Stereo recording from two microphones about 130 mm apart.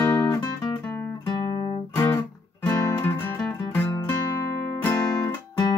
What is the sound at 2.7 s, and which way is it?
Music, 15° left (ahead or behind).